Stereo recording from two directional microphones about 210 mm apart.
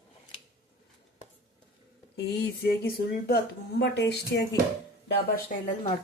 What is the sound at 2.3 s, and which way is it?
Speech, 55° left (ahead or behind).